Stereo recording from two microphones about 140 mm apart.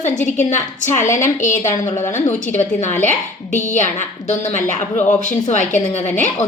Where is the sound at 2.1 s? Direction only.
60° left (ahead or behind).